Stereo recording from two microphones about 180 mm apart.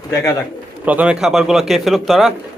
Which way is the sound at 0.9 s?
5° right (ahead or behind).